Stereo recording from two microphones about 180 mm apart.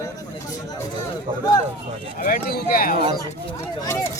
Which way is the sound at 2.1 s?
55° left (ahead or behind).